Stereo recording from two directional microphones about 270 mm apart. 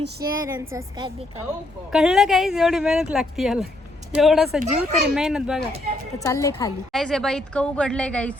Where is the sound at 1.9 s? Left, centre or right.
Centre.